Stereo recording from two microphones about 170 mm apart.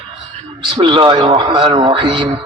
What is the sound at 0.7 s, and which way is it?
A man's voice, 30° right (ahead or behind).